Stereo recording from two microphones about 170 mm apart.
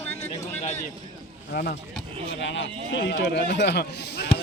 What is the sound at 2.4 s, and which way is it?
Speech, 90° left.